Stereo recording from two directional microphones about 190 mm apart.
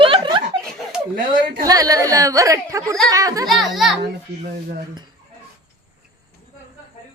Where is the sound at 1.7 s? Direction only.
20° right (ahead or behind).